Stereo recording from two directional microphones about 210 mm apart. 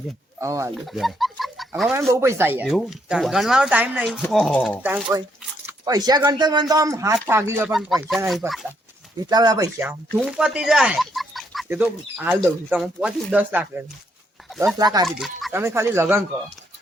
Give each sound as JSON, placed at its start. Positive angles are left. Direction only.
{"t": 0.3, "sound": "speech", "side_deg": -15}
{"t": 0.9, "sound": "chicken", "side_deg": 0}
{"t": 2.0, "sound": "speech", "side_deg": -15}
{"t": 4.8, "sound": "speech", "side_deg": -10}
{"t": 7.7, "sound": "speech", "side_deg": 0}
{"t": 9.2, "sound": "speech", "side_deg": -20}
{"t": 10.1, "sound": "speech", "side_deg": 0}
{"t": 15.0, "sound": "speech", "side_deg": 0}
{"t": 15.5, "sound": "speech", "side_deg": -10}